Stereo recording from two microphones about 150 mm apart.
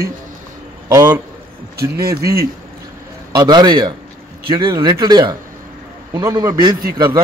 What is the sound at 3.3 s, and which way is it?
Speech, 30° right (ahead or behind).